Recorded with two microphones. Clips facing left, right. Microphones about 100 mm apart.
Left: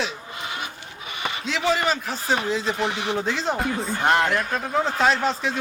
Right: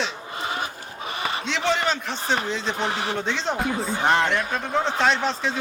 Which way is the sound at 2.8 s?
40° right (ahead or behind).